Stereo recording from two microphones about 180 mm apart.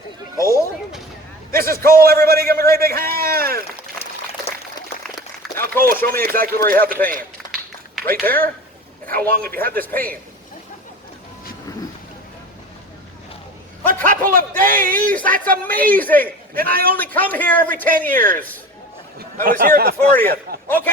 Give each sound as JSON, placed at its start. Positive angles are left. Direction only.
{"t": 0.3, "sound": "a man's voice", "side_deg": 15}
{"t": 1.5, "sound": "a man's voice", "side_deg": -55}
{"t": 5.8, "sound": "a man's voice", "side_deg": -55}
{"t": 9.7, "sound": "a man's voice", "side_deg": 10}
{"t": 13.8, "sound": "a man's voice", "side_deg": -50}
{"t": 15.6, "sound": "a man's voice", "side_deg": 10}
{"t": 16.1, "sound": "a man's voice", "side_deg": -55}
{"t": 17.0, "sound": "a man's voice", "side_deg": 10}
{"t": 18.1, "sound": "a man's voice", "side_deg": -50}
{"t": 20.7, "sound": "a man's voice", "side_deg": 10}